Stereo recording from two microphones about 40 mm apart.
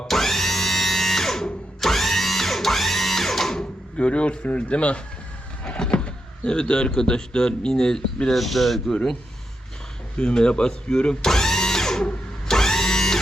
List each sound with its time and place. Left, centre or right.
0.1 s a sound: centre
1.8 s music: centre
3.6 s speech: left; by 8.4 s centre
8.4 s speech: centre
10.2 s speech: left
11.3 s a sound: centre
12.5 s power windows: centre